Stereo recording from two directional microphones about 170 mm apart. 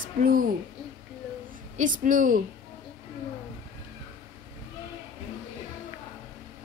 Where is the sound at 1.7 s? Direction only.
50° right (ahead or behind).